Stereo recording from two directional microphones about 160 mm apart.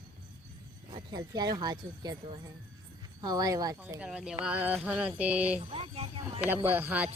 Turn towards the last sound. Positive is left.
turn(degrees=-10)  # may be behind; listen again after turning